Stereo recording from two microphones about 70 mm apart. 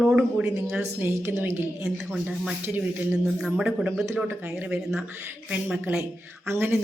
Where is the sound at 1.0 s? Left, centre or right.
Right.